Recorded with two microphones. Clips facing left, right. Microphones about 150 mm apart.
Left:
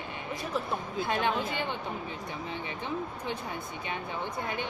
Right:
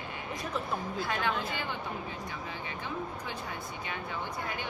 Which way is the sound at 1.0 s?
20° left (ahead or behind).